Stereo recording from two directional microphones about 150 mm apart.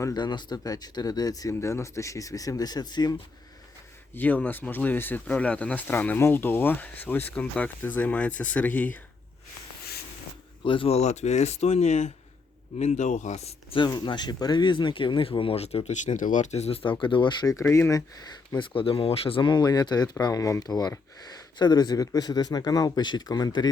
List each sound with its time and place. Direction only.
0.0 s speech: 25° left (ahead or behind)
4.1 s speech: 10° left (ahead or behind)
10.6 s speech: 35° left (ahead or behind)